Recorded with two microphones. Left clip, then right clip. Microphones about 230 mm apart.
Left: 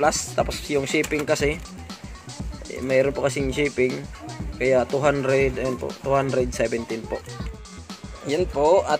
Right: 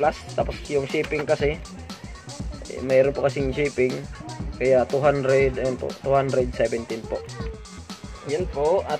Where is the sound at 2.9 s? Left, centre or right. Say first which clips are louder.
Right 2 dB; centre.